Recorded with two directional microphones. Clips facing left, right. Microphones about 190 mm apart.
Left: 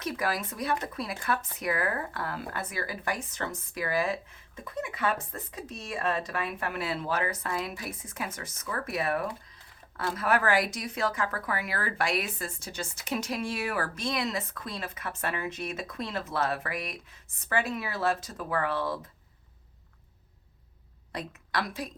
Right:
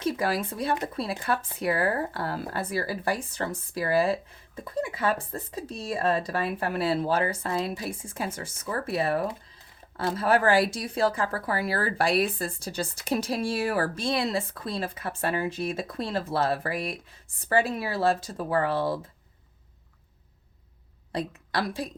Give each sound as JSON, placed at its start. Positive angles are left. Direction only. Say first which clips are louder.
{"t": 0.0, "sound": "speech", "louder": "right 4 dB", "side_deg": -30}
{"t": 21.1, "sound": "a woman's voice", "louder": "right 5 dB", "side_deg": -30}